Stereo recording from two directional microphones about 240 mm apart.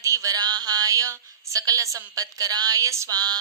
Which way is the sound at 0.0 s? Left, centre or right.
Centre.